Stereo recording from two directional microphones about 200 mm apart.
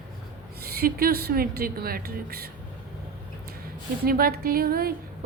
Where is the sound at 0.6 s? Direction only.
50° right (ahead or behind).